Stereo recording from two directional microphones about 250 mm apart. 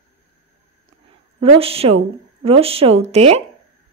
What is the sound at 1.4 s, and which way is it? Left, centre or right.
A woman's voice, right.